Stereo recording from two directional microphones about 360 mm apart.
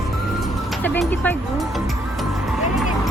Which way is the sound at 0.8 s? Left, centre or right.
Centre.